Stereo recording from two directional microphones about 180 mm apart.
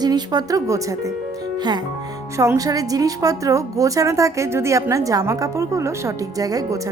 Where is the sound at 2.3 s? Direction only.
15° right (ahead or behind).